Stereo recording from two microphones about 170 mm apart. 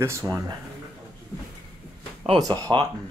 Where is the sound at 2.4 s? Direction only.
20° right (ahead or behind).